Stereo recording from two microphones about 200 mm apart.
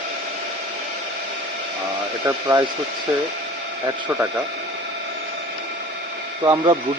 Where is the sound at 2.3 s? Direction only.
15° right (ahead or behind).